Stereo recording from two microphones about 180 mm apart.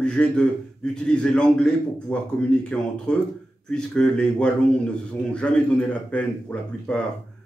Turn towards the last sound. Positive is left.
turn(degrees=5)  # may be behind; listen again after turning